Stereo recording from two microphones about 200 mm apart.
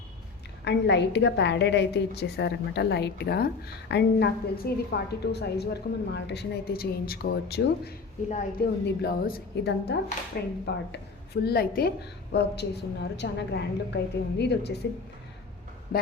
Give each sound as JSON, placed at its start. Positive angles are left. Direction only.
{"t": 0.6, "sound": "a woman's voice", "side_deg": 60}